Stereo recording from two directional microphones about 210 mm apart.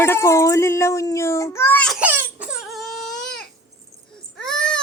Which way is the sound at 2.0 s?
5° right (ahead or behind).